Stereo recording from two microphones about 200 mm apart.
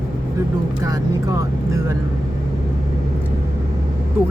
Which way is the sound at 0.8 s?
15° right (ahead or behind).